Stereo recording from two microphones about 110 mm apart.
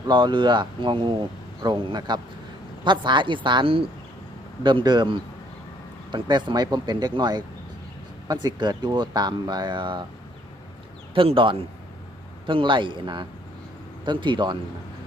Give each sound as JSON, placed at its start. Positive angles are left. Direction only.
{"t": 0.1, "sound": "speech", "side_deg": -45}
{"t": 11.1, "sound": "a man's voice", "side_deg": -50}